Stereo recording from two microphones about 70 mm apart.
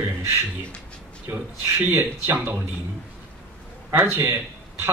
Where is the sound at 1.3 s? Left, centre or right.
Right.